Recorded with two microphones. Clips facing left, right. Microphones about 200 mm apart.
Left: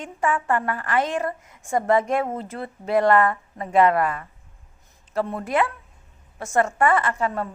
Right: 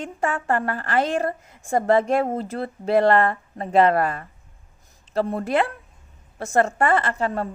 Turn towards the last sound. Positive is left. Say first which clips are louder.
# right 1 dB
turn(degrees=-30)  # may be behind; listen again after turning